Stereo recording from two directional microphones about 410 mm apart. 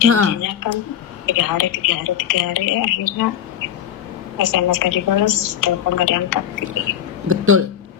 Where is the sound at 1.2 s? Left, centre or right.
Left.